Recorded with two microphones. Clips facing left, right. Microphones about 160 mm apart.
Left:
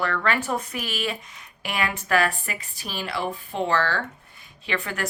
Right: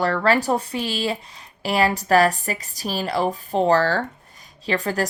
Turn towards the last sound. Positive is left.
turn(degrees=-35)  # may be behind; listen again after turning